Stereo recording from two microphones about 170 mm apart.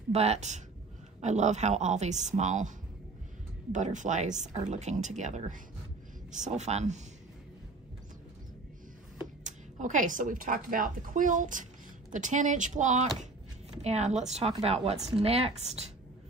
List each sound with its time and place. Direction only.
0.1 s speech: 40° right (ahead or behind)
3.7 s speech: 45° right (ahead or behind)
9.4 s speech: 45° right (ahead or behind)